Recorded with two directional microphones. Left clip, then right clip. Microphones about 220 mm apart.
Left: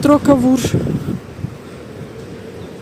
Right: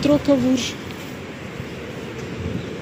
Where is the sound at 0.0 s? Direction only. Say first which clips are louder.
Left 6 dB; 30° left (ahead or behind).